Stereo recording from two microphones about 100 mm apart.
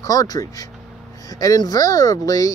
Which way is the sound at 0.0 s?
35° left (ahead or behind).